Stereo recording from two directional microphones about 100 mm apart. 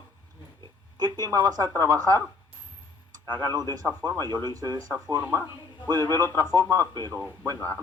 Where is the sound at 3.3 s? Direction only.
45° right (ahead or behind).